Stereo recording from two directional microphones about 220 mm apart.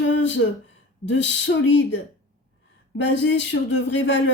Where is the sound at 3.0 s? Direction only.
55° left (ahead or behind).